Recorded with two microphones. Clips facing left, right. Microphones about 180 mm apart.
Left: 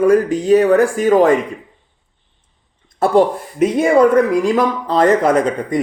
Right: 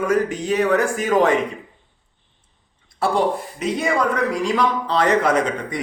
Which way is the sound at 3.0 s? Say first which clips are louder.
Left 6 dB; 50° left (ahead or behind).